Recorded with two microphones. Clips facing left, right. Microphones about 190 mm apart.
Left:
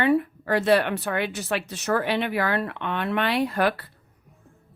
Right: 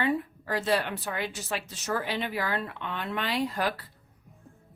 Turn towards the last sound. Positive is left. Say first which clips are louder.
# left 6 dB
turn(degrees=65)  # may be behind; listen again after turning